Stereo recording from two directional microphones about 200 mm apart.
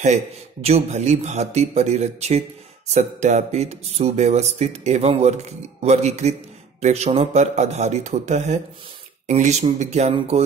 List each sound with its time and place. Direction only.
0.0 s a man's voice: 35° right (ahead or behind)